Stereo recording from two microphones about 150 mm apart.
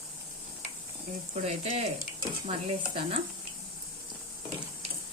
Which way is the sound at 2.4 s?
40° right (ahead or behind).